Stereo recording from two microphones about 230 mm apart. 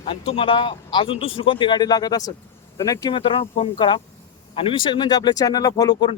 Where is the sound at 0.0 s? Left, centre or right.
Left.